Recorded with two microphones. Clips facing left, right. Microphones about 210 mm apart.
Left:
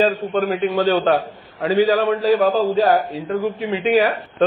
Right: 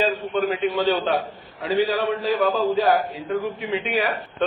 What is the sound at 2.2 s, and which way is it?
Speech, 40° left (ahead or behind).